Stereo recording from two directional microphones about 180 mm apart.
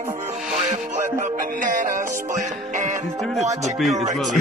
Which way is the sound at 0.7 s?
45° right (ahead or behind).